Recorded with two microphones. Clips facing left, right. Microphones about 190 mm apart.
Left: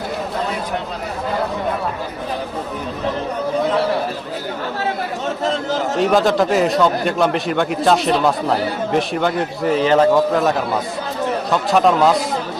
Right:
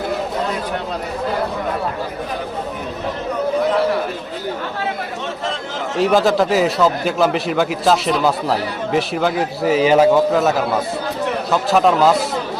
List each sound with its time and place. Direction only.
5.5 s a man's voice: 40° left (ahead or behind)
6.0 s a man's voice: centre (ahead or behind)